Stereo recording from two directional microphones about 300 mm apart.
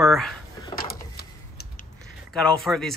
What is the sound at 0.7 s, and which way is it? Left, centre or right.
Printer, left.